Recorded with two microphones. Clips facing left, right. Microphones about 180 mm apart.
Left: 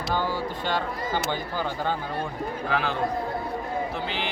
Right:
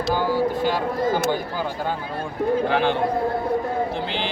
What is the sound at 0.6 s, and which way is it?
Speech, 10° right (ahead or behind).